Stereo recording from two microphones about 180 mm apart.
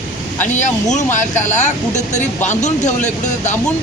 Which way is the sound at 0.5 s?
40° left (ahead or behind).